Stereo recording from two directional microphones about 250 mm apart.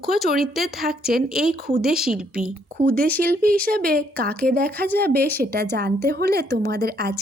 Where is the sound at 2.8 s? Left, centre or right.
Right.